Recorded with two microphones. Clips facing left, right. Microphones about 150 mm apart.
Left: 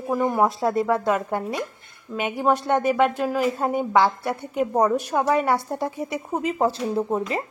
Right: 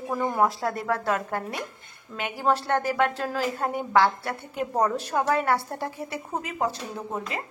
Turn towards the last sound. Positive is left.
turn(degrees=35)  # may be behind; listen again after turning